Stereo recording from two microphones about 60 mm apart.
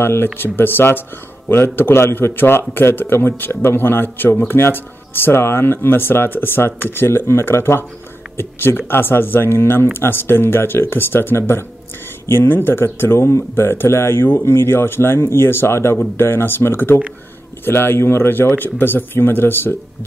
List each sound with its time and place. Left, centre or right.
0.0 s speech: left